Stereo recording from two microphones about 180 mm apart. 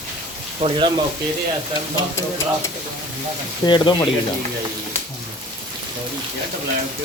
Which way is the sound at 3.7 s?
25° left (ahead or behind).